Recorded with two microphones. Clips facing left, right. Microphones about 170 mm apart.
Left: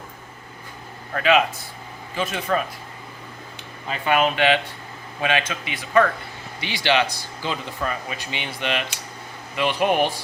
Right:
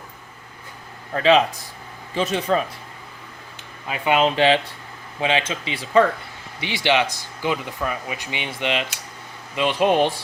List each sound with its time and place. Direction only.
1.1 s speech: 30° right (ahead or behind)
3.8 s speech: 10° right (ahead or behind)
4.1 s speech: 25° right (ahead or behind)